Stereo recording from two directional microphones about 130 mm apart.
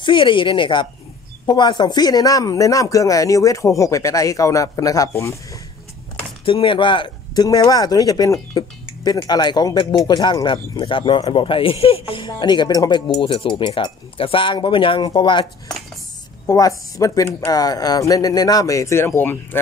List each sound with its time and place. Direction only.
0.0 s speech: 40° left (ahead or behind); by 5.4 s 25° left (ahead or behind)
6.4 s speech: 40° left (ahead or behind)
7.4 s speech: 30° left (ahead or behind)
16.4 s speech: 25° left (ahead or behind)